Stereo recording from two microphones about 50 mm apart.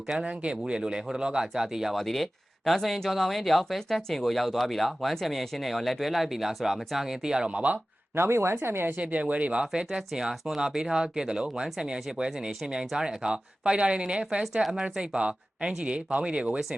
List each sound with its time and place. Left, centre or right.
0.3 s speech: right
2.0 s speech: centre
7.5 s speech: right
8.1 s speech: right
8.5 s a woman's voice: right
9.0 s speech: right
10.1 s speech: centre
14.4 s speech: centre
14.8 s speech: right